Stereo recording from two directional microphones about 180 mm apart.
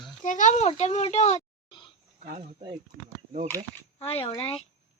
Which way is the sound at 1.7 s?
25° left (ahead or behind).